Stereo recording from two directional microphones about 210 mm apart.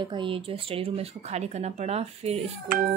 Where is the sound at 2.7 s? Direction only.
40° right (ahead or behind).